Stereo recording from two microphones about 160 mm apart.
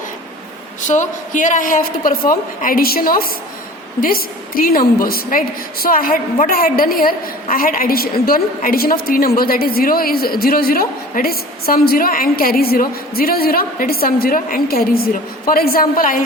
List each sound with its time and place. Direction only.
0.9 s a woman's voice: 50° left (ahead or behind)